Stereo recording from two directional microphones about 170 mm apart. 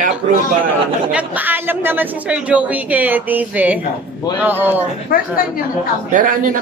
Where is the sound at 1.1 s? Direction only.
10° right (ahead or behind).